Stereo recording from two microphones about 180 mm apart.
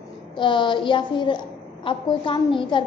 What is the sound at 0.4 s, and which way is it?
A woman's voice, 25° left (ahead or behind).